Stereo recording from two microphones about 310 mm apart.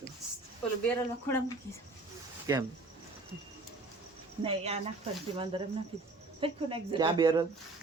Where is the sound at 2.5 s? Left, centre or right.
Centre.